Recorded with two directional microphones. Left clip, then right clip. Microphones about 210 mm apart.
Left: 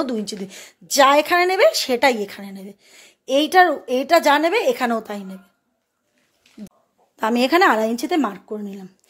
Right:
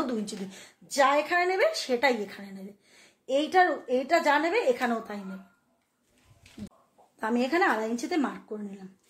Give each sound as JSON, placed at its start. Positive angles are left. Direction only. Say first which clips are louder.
{"t": 0.0, "sound": "a woman's voice", "louder": "left 7 dB", "side_deg": 40}
{"t": 7.2, "sound": "a woman's voice", "louder": "left 10 dB", "side_deg": 45}